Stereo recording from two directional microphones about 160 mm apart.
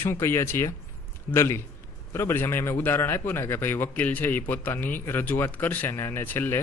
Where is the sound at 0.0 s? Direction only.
15° left (ahead or behind).